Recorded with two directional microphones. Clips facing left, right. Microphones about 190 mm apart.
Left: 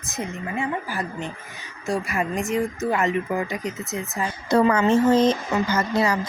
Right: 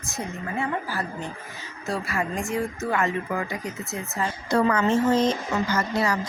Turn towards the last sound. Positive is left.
turn(degrees=20)  # may be behind; listen again after turning